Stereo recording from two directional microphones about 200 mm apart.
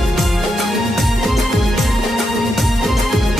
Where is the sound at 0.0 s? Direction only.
Centre (ahead or behind).